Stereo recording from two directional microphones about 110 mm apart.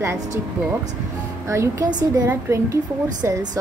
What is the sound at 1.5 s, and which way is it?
Speech, 25° right (ahead or behind).